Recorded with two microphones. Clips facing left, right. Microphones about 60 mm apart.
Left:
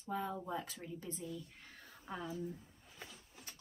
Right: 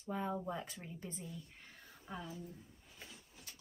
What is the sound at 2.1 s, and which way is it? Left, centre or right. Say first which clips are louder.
Speech: left 2 dB; centre.